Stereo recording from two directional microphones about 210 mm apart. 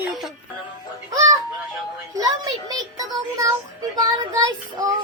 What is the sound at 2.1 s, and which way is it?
Speech, 15° right (ahead or behind).